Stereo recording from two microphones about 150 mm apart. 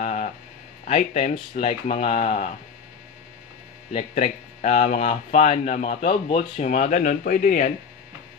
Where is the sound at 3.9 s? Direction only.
45° left (ahead or behind).